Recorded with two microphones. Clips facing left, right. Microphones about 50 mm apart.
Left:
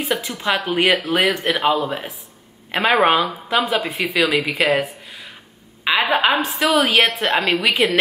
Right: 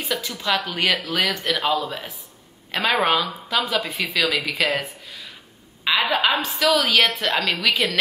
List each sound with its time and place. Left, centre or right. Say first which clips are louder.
0.0 s speech: left 4 dB; left
4.8 s a sound: left 3 dB; left
6.3 s speech: left 3 dB; left